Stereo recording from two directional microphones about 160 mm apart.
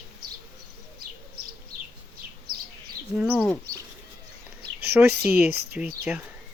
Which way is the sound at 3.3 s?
5° left (ahead or behind).